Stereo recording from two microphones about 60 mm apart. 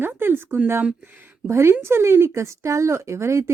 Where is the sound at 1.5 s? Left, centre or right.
Right.